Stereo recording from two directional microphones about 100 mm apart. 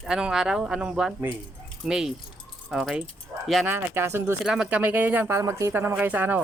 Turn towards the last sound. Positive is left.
turn(degrees=-15)  # may be behind; listen again after turning